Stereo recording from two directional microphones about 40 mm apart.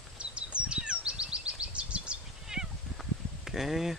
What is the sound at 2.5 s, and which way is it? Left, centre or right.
Cat, centre.